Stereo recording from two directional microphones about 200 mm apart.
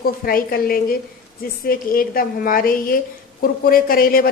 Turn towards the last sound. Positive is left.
turn(degrees=45)  # may be behind; listen again after turning